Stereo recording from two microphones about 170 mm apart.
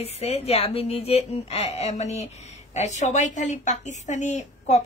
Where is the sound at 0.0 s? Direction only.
40° left (ahead or behind).